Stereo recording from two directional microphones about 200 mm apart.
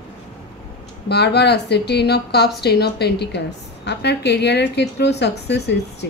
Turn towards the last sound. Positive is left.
turn(degrees=55)  # may be behind; listen again after turning